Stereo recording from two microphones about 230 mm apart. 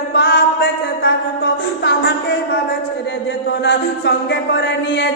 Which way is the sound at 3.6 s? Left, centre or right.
Left.